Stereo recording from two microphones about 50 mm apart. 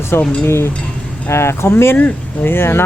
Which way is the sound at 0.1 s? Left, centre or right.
Left.